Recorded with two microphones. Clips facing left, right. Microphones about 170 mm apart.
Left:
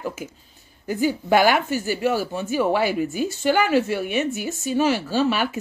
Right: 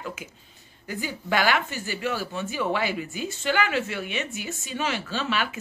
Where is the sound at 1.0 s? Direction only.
45° left (ahead or behind).